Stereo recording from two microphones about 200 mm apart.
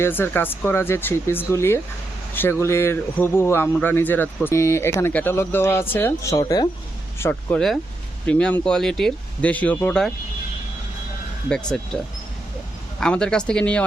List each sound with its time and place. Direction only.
0.0 s a man's voice: 10° left (ahead or behind)
7.2 s a man's voice: 10° left (ahead or behind)
11.4 s speech: 5° left (ahead or behind)
13.0 s speech: 5° left (ahead or behind)